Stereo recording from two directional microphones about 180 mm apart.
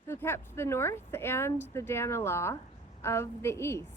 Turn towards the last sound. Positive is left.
turn(degrees=15)  # may be behind; listen again after turning